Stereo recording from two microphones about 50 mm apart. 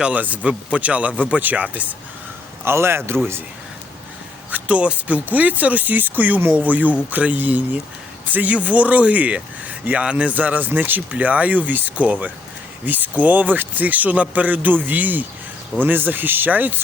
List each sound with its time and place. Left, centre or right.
0.0 s speech: right
2.6 s a man's voice: right
4.5 s speech: right
11.1 s speech: right